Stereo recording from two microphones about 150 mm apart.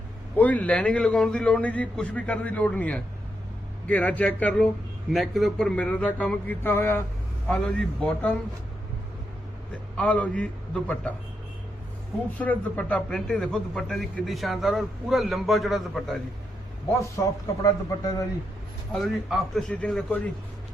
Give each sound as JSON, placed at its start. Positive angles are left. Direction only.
{"t": 0.3, "sound": "a man's voice", "side_deg": 10}
{"t": 10.0, "sound": "a man's voice", "side_deg": 10}
{"t": 12.4, "sound": "a man's voice", "side_deg": 10}
{"t": 17.4, "sound": "speech", "side_deg": 25}
{"t": 18.9, "sound": "a man's voice", "side_deg": 5}